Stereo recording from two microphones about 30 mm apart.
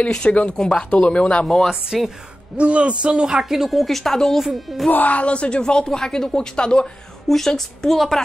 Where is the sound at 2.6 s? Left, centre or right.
Right.